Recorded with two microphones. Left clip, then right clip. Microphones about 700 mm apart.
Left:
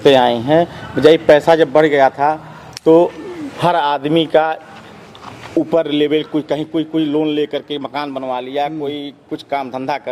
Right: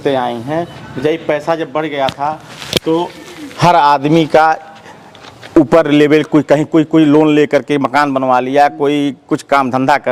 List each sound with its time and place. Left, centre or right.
0.0 s speech: centre
3.6 s a man's voice: right
5.7 s a man's voice: right